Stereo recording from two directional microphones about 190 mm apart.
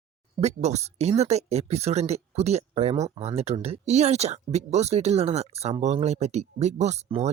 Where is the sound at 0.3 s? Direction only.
35° right (ahead or behind).